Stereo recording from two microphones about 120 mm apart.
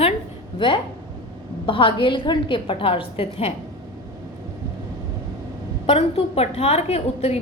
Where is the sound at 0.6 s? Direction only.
40° left (ahead or behind).